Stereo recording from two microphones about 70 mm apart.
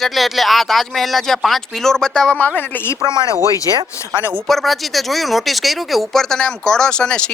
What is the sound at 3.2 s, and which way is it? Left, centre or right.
Speech, left.